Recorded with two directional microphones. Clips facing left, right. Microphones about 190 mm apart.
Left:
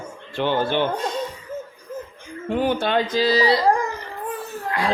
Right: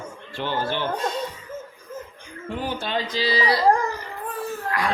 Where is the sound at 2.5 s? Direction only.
60° left (ahead or behind).